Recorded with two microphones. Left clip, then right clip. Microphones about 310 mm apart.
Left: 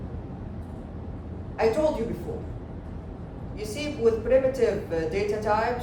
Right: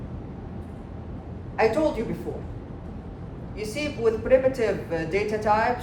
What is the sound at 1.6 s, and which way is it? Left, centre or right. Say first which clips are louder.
Speech: right 2 dB; right.